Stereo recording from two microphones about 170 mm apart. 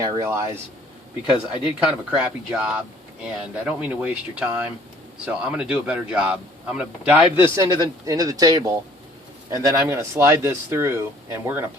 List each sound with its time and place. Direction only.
0.0 s speech: 15° right (ahead or behind)
1.6 s speech: 5° right (ahead or behind)